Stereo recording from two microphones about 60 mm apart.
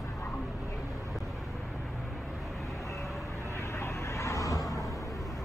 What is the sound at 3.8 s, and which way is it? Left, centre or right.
Vehicle, left.